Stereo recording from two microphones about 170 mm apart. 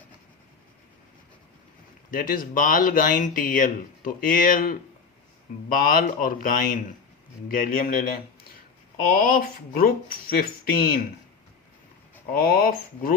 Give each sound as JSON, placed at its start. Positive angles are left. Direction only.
{"t": 2.0, "sound": "speech", "side_deg": 55}
{"t": 9.0, "sound": "speech", "side_deg": 55}
{"t": 12.3, "sound": "speech", "side_deg": 60}